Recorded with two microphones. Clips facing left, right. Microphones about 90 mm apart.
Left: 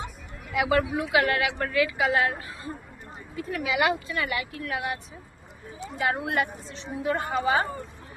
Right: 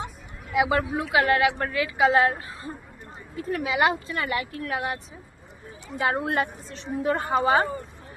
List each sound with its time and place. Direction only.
0.5 s a woman's voice: 20° right (ahead or behind)
6.0 s speech: 30° right (ahead or behind)